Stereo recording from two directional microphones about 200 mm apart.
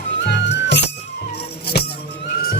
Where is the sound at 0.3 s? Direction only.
55° left (ahead or behind).